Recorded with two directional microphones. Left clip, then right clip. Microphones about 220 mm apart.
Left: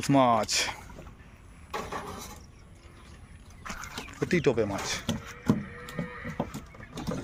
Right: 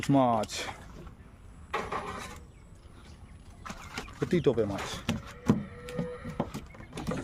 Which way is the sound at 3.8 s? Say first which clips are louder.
Left 1 dB; centre (ahead or behind).